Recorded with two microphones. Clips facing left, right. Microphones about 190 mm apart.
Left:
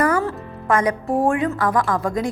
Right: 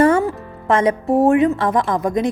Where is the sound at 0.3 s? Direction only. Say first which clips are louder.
Right 2 dB; 25° right (ahead or behind).